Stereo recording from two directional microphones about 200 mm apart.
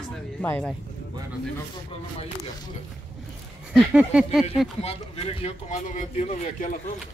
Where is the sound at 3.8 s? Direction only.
5° right (ahead or behind).